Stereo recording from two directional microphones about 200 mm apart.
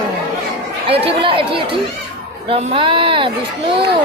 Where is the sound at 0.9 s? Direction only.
25° right (ahead or behind).